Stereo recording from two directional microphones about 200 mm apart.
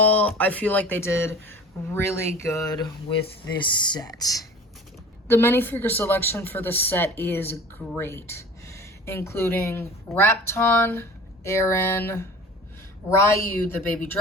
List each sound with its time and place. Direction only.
0.0 s a woman's voice: 10° left (ahead or behind)
3.9 s a woman's voice: 20° left (ahead or behind)